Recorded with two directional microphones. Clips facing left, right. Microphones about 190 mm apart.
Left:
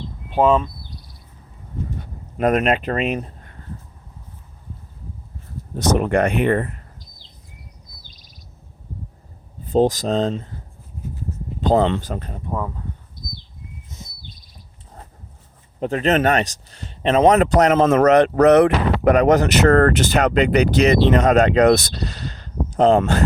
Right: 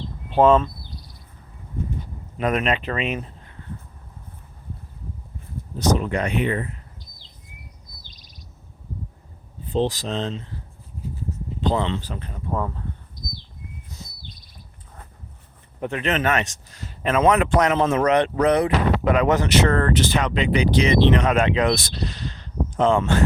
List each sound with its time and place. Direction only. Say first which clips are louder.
0.3 s speech: right 1 dB; 10° left (ahead or behind)
2.0 s a sound: left 9 dB; 45° left (ahead or behind)
5.7 s speech: left 4 dB; 55° left (ahead or behind)
9.7 s speech: left 6 dB; 45° left (ahead or behind)
11.6 s speech: left 6 dB; 45° left (ahead or behind)
12.5 s speech: even; 10° left (ahead or behind)
15.8 s speech: left 5 dB; 35° left (ahead or behind)
18.4 s speech: left 8 dB; 65° left (ahead or behind)
19.0 s speech: left 8 dB; 40° left (ahead or behind)